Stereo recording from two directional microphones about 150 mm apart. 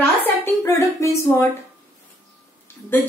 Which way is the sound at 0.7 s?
20° left (ahead or behind).